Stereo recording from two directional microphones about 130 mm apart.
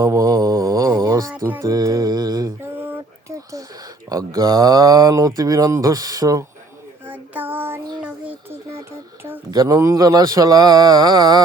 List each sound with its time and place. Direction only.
0.0 s mantra: 25° right (ahead or behind)
1.4 s speech: 20° right (ahead or behind)
2.7 s a sound: 15° right (ahead or behind)
4.1 s speech: 25° right (ahead or behind)
7.1 s child singing: 15° right (ahead or behind)
8.0 s a sound: 10° right (ahead or behind)
9.5 s speech: 25° right (ahead or behind)